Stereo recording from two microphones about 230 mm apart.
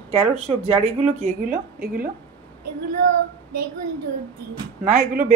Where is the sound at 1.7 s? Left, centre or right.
Right.